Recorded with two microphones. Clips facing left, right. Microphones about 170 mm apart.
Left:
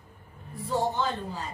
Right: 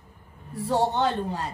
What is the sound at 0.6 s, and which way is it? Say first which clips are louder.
Speech: right 4 dB; 75° right (ahead or behind).